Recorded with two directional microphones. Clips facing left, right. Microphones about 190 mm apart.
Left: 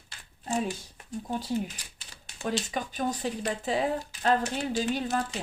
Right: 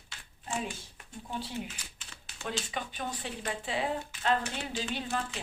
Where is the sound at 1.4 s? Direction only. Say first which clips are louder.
Left 5 dB; 35° left (ahead or behind).